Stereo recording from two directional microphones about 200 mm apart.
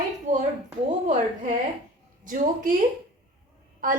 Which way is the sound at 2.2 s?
40° right (ahead or behind).